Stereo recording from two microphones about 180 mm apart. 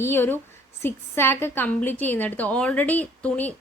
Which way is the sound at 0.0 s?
15° left (ahead or behind).